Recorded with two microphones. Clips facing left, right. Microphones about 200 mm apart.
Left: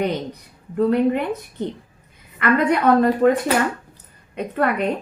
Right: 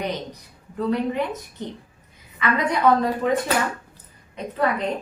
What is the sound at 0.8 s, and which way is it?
A woman's voice, 55° left (ahead or behind).